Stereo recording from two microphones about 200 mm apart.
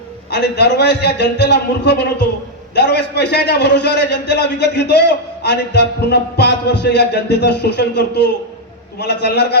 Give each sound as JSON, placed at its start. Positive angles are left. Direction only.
{"t": 0.3, "sound": "a man's voice", "side_deg": 60}